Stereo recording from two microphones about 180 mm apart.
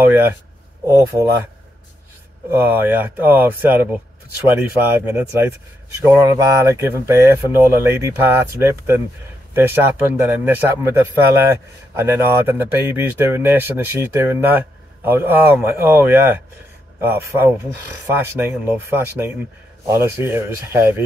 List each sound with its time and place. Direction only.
0.0 s speech: 10° right (ahead or behind)
2.5 s speech: 10° right (ahead or behind)